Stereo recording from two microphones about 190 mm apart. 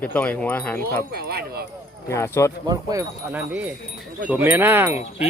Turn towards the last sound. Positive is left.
turn(degrees=-10)  # may be behind; listen again after turning